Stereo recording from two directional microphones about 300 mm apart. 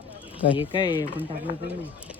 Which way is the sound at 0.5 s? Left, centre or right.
Centre.